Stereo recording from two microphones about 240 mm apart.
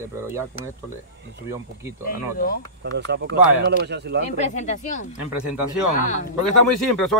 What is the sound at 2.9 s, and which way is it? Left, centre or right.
Speech, right.